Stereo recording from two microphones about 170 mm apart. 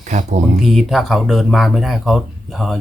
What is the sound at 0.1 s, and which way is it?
Speech, 45° right (ahead or behind).